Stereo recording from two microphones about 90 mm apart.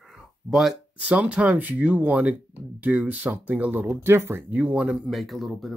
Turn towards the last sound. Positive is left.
turn(degrees=0)  # may be behind; listen again after turning